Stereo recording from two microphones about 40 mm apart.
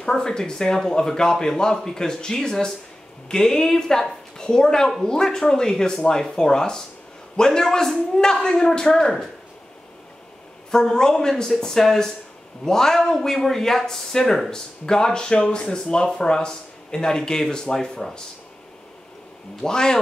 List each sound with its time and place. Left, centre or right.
0.0 s a woman's voice: centre
10.7 s speech: centre
19.6 s speech: centre